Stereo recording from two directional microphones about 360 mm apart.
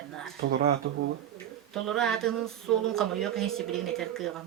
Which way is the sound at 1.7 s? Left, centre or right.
Centre.